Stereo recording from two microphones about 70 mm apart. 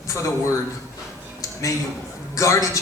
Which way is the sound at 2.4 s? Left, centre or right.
Left.